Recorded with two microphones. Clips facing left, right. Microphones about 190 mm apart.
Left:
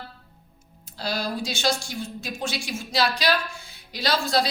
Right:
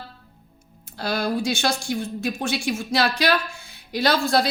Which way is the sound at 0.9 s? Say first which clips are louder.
Right 4 dB; 55° right (ahead or behind).